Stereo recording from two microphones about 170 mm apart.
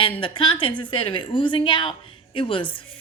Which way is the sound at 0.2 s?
30° left (ahead or behind).